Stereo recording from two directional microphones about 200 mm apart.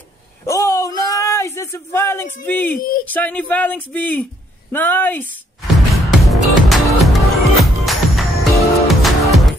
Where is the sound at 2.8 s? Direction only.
45° left (ahead or behind).